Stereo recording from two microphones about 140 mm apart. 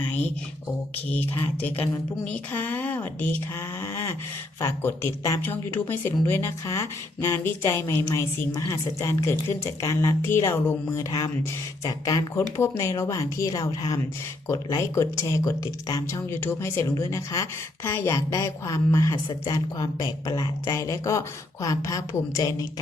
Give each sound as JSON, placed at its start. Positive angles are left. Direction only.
{"t": 1.1, "sound": "speech", "side_deg": 10}